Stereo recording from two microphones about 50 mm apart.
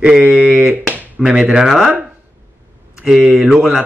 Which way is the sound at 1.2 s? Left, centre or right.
Centre.